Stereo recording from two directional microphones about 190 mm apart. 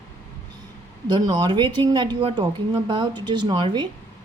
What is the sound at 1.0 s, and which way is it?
Speech, 20° right (ahead or behind).